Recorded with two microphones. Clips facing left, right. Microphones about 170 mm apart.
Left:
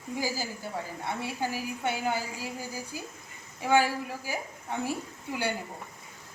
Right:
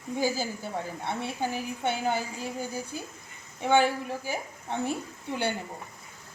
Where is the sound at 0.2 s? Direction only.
25° right (ahead or behind).